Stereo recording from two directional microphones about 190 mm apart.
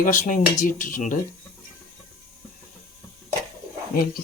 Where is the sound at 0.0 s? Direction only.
45° left (ahead or behind).